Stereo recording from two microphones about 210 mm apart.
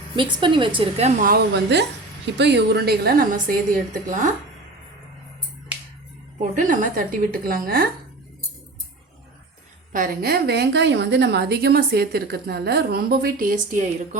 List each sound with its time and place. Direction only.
0.2 s a woman's voice: 20° right (ahead or behind); by 3.6 s 40° right (ahead or behind)
6.4 s a woman's voice: 40° right (ahead or behind)
9.9 s a woman's voice: 40° right (ahead or behind)